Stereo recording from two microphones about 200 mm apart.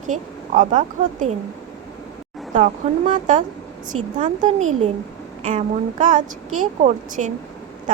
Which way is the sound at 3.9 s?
90° right.